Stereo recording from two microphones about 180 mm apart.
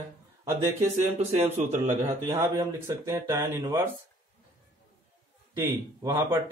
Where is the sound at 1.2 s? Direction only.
40° right (ahead or behind).